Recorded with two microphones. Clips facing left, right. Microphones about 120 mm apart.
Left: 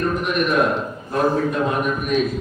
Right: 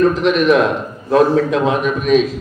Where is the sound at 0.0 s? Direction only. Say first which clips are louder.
Right 8 dB; 90° right.